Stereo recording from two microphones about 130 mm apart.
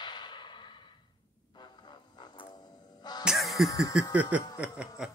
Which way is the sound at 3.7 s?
25° left (ahead or behind).